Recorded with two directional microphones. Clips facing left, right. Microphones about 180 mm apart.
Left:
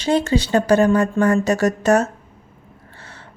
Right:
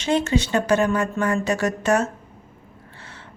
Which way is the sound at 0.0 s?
35° left (ahead or behind).